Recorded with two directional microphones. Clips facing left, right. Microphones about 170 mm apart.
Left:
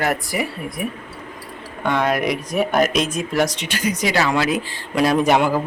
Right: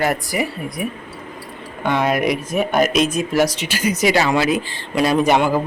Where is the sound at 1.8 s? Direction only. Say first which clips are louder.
Right 1 dB; 5° right (ahead or behind).